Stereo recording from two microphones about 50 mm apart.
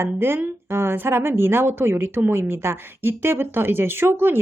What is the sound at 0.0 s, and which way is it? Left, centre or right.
A woman's voice, right.